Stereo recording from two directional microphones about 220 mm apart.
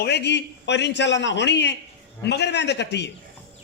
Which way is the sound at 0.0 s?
50° left (ahead or behind).